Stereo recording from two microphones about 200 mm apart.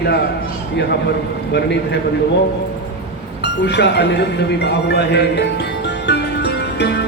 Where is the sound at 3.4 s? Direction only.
55° left (ahead or behind).